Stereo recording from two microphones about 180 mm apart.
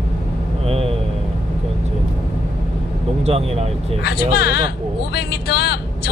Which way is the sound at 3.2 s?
35° right (ahead or behind).